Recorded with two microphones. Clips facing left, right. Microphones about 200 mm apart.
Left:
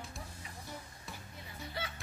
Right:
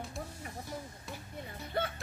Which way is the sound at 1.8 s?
55° right (ahead or behind).